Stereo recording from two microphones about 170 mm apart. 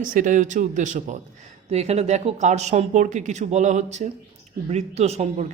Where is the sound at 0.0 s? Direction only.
50° right (ahead or behind).